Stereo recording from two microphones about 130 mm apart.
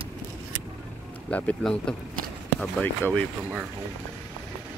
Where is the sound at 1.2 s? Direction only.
10° left (ahead or behind).